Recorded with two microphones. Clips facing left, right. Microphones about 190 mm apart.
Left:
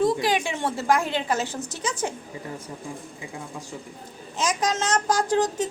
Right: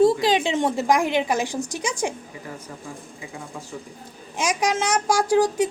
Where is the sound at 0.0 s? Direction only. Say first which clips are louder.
Right 5 dB; 25° right (ahead or behind).